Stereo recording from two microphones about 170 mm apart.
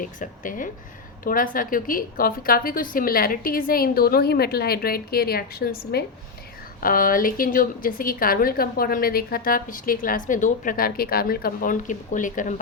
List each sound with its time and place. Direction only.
0.0 s a woman's voice: 50° left (ahead or behind)